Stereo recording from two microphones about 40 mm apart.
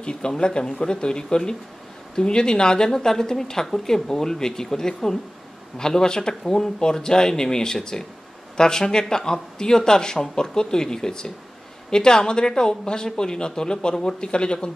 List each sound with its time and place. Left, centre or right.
0.0 s a man's voice: left